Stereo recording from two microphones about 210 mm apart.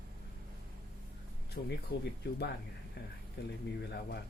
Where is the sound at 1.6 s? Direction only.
50° left (ahead or behind).